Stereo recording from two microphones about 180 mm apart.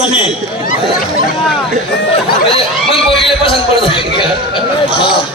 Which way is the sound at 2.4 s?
30° left (ahead or behind).